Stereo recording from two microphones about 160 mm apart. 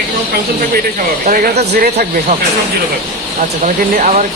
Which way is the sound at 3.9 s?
50° right (ahead or behind).